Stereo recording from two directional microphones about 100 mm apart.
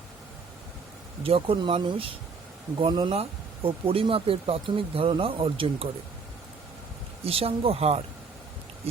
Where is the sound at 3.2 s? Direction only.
65° right (ahead or behind).